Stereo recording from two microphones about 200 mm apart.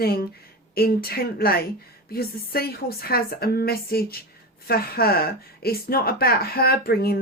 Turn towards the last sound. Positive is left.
turn(degrees=50)  # may be behind; listen again after turning